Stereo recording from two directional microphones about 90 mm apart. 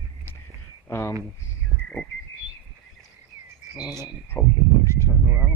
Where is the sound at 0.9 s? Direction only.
35° left (ahead or behind).